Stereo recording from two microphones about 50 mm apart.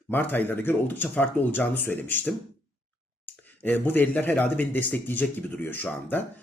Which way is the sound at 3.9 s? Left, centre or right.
Left.